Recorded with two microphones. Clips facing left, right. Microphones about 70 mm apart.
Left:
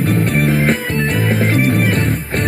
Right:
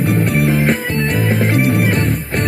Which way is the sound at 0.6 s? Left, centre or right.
Centre.